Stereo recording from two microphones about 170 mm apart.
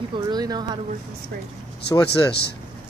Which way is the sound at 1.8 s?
75° left (ahead or behind).